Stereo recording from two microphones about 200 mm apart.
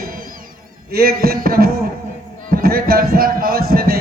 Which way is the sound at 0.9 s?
50° right (ahead or behind).